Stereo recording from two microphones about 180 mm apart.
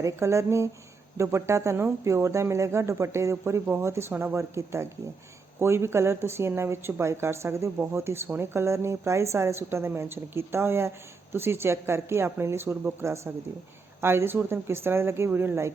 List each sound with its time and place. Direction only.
0.0 s a woman's voice: 15° right (ahead or behind)